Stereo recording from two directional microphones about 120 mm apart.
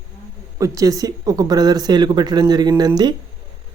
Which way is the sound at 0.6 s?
30° right (ahead or behind).